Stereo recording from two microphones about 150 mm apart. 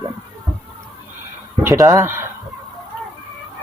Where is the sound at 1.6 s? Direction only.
20° right (ahead or behind).